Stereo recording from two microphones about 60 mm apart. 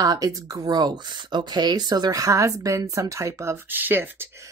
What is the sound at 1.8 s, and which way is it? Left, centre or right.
A woman's voice, right.